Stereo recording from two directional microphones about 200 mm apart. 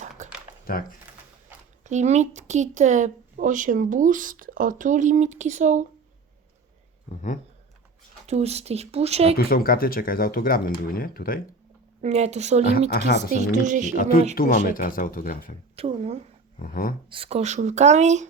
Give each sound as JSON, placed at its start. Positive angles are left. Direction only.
{"t": 0.2, "sound": "a sound", "side_deg": -35}
{"t": 0.7, "sound": "speech", "side_deg": 45}
{"t": 1.8, "sound": "speech", "side_deg": -35}
{"t": 8.3, "sound": "speech", "side_deg": -30}
{"t": 9.5, "sound": "speech", "side_deg": 45}
{"t": 12.0, "sound": "speech", "side_deg": -35}
{"t": 13.9, "sound": "speech", "side_deg": 45}
{"t": 15.7, "sound": "speech", "side_deg": -30}
{"t": 16.6, "sound": "speech", "side_deg": 45}
{"t": 17.1, "sound": "speech", "side_deg": -30}